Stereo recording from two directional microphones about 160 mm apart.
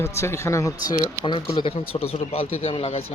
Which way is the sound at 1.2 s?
30° left (ahead or behind).